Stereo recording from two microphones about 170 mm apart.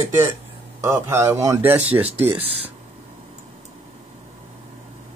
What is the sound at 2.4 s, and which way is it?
Speech, 35° right (ahead or behind).